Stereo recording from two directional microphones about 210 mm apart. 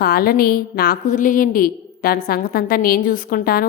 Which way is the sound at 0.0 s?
45° left (ahead or behind).